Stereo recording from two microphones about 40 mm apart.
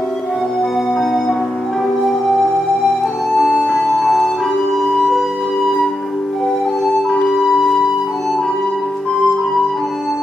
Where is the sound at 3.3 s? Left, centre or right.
Centre.